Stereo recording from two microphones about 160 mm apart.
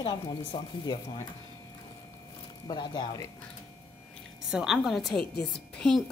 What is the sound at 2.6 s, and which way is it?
Speech, 30° left (ahead or behind).